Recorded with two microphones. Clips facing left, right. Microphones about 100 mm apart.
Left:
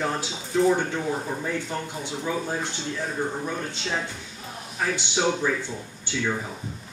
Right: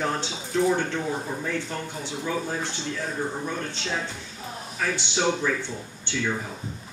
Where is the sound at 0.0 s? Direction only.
5° left (ahead or behind).